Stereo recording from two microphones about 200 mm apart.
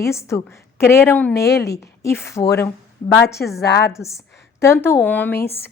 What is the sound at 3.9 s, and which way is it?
A woman's voice, 15° left (ahead or behind).